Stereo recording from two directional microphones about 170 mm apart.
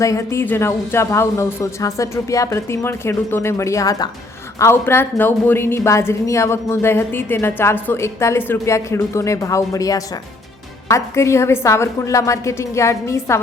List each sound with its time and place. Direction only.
0.0 s a woman's voice: 15° left (ahead or behind)